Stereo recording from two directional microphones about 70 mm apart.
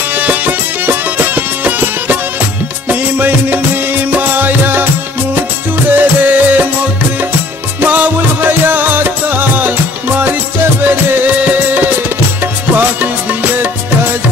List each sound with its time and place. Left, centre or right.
0.1 s music: right
5.9 s music: right
7.8 s music: right